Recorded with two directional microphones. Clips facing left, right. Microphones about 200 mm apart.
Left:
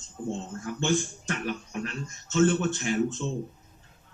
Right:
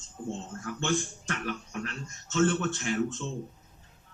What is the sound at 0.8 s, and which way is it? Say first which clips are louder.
A man's voice: left 3 dB; 15° left (ahead or behind).